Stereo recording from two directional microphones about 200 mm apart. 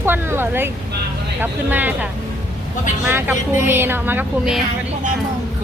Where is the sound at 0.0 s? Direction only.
10° right (ahead or behind).